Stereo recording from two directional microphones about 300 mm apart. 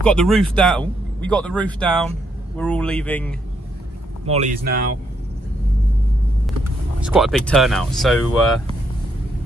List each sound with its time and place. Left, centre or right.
0.0 s speech: centre
4.3 s speech: right
6.4 s speech: centre